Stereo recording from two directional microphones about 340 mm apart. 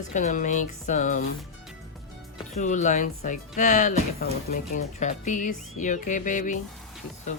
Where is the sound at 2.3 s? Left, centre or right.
Left.